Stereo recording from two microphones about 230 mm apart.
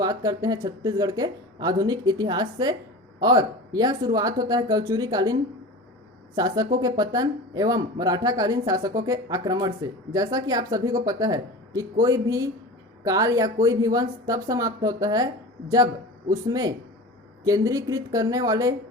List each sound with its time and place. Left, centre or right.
0.0 s speech: centre
16.5 s speech: centre